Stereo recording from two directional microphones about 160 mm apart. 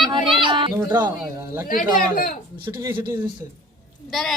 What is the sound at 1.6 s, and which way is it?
Speech, 60° left (ahead or behind).